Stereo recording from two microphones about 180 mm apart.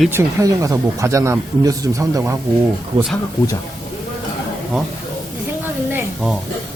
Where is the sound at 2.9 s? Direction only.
30° right (ahead or behind).